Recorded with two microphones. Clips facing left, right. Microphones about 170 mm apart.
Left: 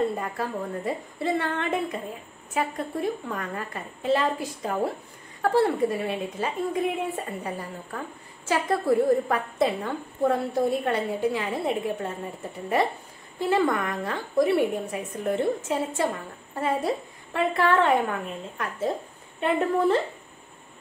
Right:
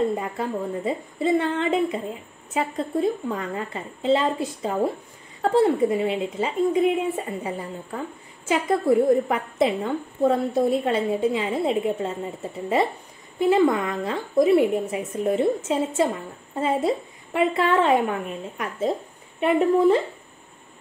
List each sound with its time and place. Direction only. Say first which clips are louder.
0.1 s a woman's voice: right 3 dB; 20° right (ahead or behind)